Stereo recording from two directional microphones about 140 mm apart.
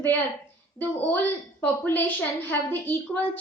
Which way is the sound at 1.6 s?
15° left (ahead or behind).